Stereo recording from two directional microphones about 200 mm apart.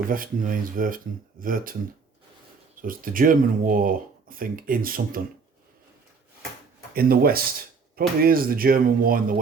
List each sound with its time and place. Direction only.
0.1 s speech: 45° right (ahead or behind)
2.8 s speech: 45° right (ahead or behind)
6.9 s speech: 50° right (ahead or behind)